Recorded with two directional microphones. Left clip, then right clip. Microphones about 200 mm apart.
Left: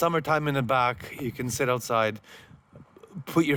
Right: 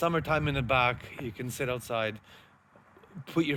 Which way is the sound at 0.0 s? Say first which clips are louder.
Left 4 dB; 60° left (ahead or behind).